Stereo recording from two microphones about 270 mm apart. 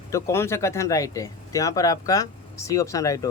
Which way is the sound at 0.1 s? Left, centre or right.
Centre.